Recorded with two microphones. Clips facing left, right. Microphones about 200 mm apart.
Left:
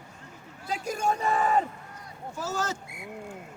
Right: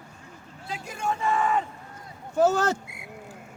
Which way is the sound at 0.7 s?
40° left (ahead or behind).